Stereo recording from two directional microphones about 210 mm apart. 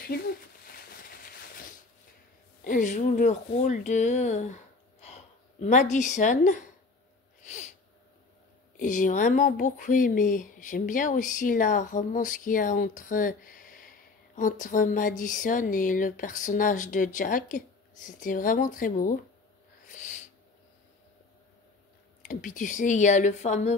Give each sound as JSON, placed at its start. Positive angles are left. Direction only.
{"t": 2.6, "sound": "a woman's voice", "side_deg": 40}
{"t": 8.7, "sound": "speech", "side_deg": 40}
{"t": 22.2, "sound": "speech", "side_deg": 40}